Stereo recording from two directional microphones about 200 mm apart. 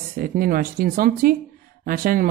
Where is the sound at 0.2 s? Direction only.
45° right (ahead or behind).